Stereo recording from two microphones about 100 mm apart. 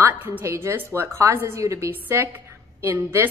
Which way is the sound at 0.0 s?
20° right (ahead or behind).